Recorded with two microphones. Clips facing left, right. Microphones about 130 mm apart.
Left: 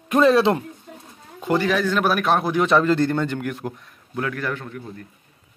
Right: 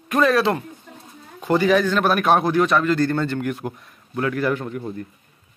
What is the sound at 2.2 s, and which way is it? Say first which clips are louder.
Speech: right 3 dB; centre (ahead or behind).